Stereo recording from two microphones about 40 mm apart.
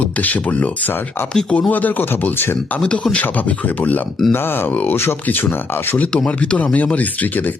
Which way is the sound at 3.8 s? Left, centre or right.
Left.